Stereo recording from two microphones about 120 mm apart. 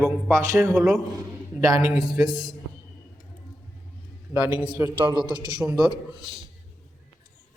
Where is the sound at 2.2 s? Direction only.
35° right (ahead or behind).